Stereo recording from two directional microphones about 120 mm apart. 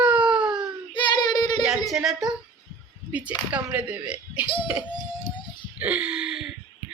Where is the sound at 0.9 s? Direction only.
35° left (ahead or behind).